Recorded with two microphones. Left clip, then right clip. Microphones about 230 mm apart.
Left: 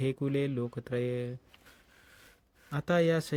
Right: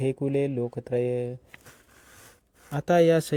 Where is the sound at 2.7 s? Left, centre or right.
Centre.